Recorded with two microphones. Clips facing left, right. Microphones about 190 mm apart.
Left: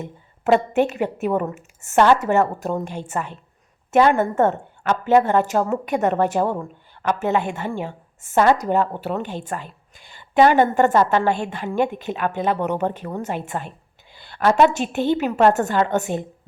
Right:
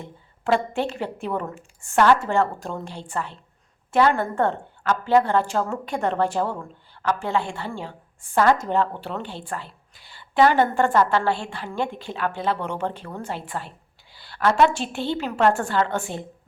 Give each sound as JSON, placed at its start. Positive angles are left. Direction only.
{"t": 0.0, "sound": "a woman's voice", "side_deg": 20}